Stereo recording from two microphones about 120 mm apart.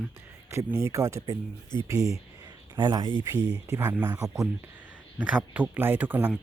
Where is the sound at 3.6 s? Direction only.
20° right (ahead or behind).